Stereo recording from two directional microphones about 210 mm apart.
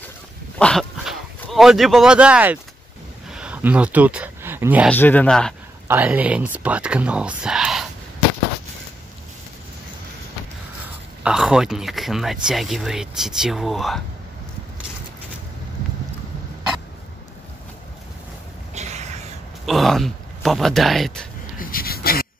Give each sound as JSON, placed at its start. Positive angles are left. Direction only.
{"t": 0.6, "sound": "speech", "side_deg": 5}
{"t": 3.3, "sound": "a sound", "side_deg": -5}
{"t": 4.9, "sound": "speech", "side_deg": 10}
{"t": 5.9, "sound": "speech", "side_deg": -5}
{"t": 11.2, "sound": "speech", "side_deg": -5}
{"t": 18.8, "sound": "a sound", "side_deg": -35}
{"t": 19.6, "sound": "speech", "side_deg": 0}
{"t": 21.5, "sound": "gasp", "side_deg": 45}